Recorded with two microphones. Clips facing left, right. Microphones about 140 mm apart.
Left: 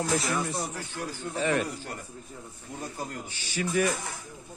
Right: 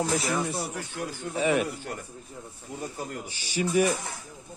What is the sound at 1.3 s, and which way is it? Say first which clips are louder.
Speech: right 3 dB; 10° right (ahead or behind).